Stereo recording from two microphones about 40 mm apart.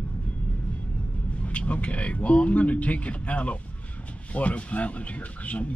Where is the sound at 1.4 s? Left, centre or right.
Left.